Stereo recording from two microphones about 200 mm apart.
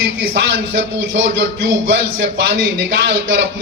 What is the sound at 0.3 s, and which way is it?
A man's voice, 70° right (ahead or behind).